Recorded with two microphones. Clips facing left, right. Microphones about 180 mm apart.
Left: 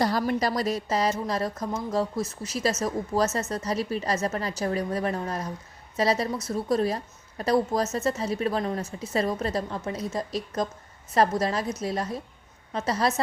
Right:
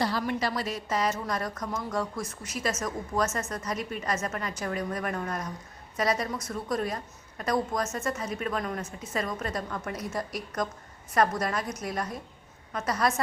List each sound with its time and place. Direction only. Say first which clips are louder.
0.0 s a woman's voice: left 4 dB; 40° left (ahead or behind)